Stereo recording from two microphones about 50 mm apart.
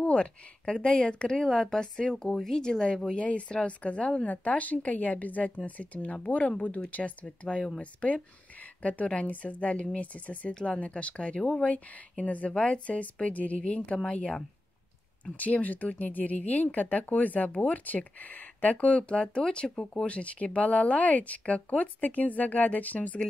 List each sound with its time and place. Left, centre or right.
0.0 s a sound: left
0.8 s a woman's voice: left
1.4 s a woman's voice: centre; by 7.2 s left
7.2 s a woman's voice: centre
10.5 s a woman's voice: centre; by 23.2 s left